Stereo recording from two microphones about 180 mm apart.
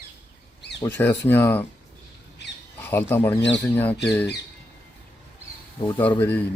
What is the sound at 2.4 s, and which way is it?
Squawk, 70° left (ahead or behind).